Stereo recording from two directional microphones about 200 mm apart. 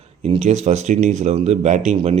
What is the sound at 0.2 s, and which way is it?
Speech, 35° right (ahead or behind).